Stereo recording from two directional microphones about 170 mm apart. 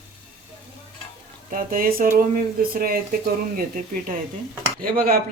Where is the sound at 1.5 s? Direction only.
55° right (ahead or behind).